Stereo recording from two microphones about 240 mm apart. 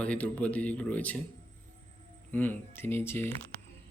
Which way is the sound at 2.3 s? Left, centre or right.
Centre.